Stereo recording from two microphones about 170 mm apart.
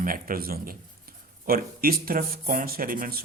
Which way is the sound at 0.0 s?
55° right (ahead or behind).